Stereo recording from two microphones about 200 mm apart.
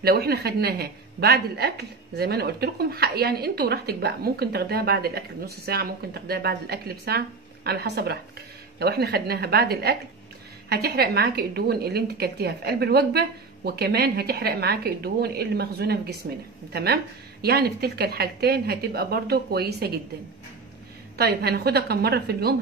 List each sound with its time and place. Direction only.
0.0 s a woman's voice: 50° right (ahead or behind)
21.2 s a woman's voice: 55° right (ahead or behind)